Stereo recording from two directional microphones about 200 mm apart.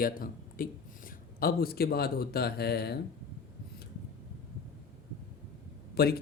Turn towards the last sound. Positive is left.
turn(degrees=50)  # may be behind; listen again after turning